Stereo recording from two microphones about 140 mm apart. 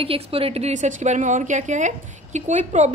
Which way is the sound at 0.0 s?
40° right (ahead or behind).